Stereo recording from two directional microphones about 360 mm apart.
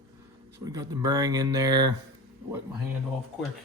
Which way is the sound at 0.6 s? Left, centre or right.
Centre.